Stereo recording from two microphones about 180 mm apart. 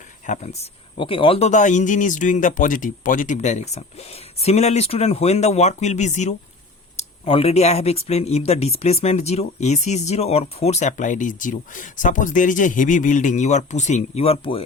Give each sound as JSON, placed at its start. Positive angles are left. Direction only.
{"t": 0.3, "sound": "speech", "side_deg": 40}
{"t": 0.9, "sound": "speech", "side_deg": 30}